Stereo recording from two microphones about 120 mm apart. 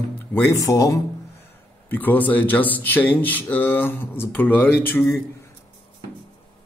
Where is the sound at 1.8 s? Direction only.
15° left (ahead or behind).